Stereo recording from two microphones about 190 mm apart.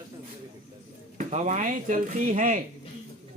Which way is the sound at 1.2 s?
40° right (ahead or behind).